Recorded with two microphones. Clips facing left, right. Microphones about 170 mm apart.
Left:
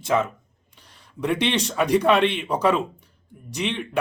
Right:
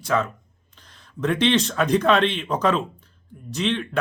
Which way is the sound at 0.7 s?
10° left (ahead or behind).